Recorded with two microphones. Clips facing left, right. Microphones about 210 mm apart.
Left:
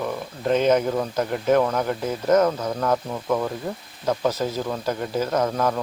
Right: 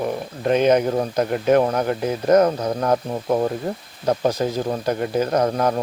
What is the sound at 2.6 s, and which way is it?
Speech, 35° right (ahead or behind).